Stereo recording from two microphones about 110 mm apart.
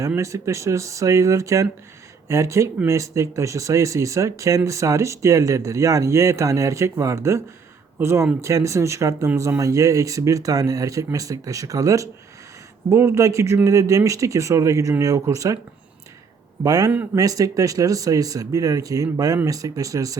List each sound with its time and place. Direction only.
0.2 s speech: 25° right (ahead or behind)
16.6 s speech: 35° right (ahead or behind)